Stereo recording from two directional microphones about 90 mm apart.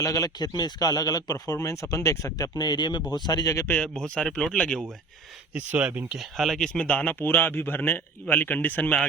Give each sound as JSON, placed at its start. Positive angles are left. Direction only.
{"t": 0.0, "sound": "a man's voice", "side_deg": 40}
{"t": 3.7, "sound": "speech", "side_deg": 10}
{"t": 5.5, "sound": "speech", "side_deg": -20}
{"t": 6.1, "sound": "speech", "side_deg": 0}
{"t": 6.7, "sound": "a man's voice", "side_deg": 15}